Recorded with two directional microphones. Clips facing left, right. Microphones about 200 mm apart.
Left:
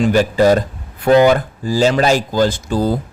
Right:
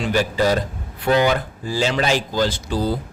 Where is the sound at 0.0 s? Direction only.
45° left (ahead or behind).